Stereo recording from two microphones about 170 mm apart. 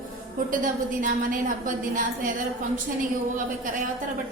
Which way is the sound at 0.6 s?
50° right (ahead or behind).